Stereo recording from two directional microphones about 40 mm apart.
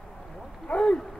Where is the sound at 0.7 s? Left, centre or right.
Left.